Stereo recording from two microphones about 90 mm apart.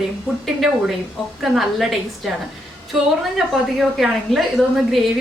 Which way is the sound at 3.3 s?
5° right (ahead or behind).